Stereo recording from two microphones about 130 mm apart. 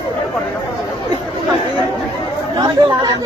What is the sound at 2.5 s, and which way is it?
Chatter, 30° right (ahead or behind).